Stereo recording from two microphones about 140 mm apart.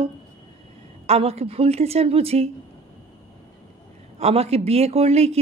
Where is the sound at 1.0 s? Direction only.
45° right (ahead or behind).